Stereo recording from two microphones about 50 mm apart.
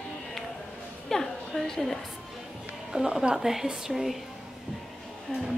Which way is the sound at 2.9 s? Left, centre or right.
Centre.